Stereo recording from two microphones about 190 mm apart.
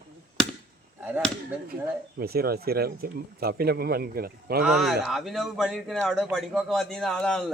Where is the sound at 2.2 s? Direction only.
55° right (ahead or behind).